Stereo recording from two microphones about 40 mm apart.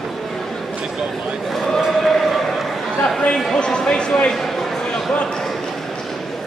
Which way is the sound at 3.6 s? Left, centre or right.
Left.